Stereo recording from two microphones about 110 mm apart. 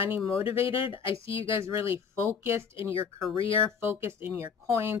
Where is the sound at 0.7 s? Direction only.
55° left (ahead or behind).